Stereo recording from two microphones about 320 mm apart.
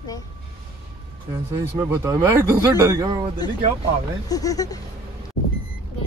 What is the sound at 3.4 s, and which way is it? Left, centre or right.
Speech, centre.